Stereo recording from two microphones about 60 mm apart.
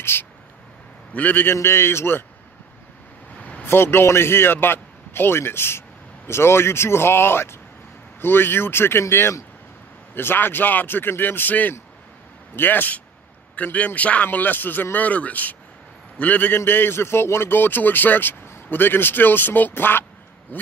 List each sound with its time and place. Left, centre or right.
0.0 s a man's voice: left
3.6 s a man's voice: left
10.1 s a man's voice: left